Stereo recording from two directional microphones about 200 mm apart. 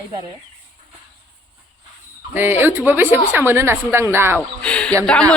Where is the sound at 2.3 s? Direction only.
10° right (ahead or behind).